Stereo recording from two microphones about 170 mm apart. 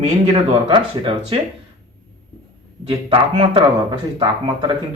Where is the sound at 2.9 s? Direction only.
30° right (ahead or behind).